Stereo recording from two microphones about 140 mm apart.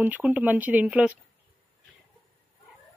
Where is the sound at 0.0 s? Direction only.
10° right (ahead or behind).